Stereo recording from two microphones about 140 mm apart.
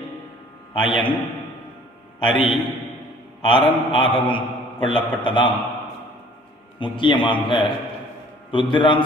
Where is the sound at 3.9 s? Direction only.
35° left (ahead or behind).